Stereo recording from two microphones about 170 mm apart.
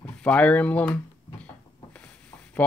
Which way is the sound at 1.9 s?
10° left (ahead or behind).